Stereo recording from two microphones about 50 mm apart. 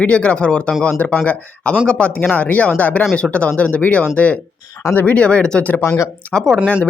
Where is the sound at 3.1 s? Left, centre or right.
Left.